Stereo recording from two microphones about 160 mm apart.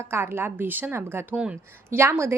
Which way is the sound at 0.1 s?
15° right (ahead or behind).